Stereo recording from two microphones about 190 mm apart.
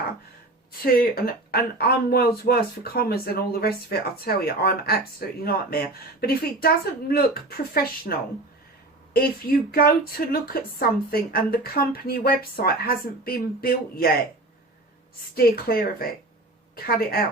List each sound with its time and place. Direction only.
0.9 s speech: 50° left (ahead or behind)
9.1 s speech: 50° left (ahead or behind)
15.4 s speech: 50° left (ahead or behind)